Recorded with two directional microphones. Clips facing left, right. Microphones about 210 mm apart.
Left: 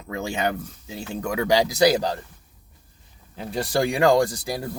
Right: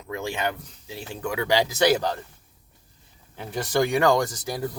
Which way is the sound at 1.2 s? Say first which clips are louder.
Left 2 dB; 40° left (ahead or behind).